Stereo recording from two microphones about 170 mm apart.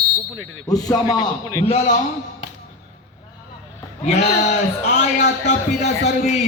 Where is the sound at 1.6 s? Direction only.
40° left (ahead or behind).